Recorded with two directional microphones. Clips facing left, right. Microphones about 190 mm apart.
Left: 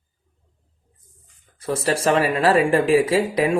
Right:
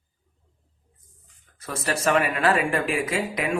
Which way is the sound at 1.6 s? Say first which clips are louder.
Left 5 dB; 30° left (ahead or behind).